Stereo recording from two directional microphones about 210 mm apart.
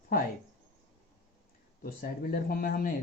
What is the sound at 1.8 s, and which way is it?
Speech, 45° left (ahead or behind).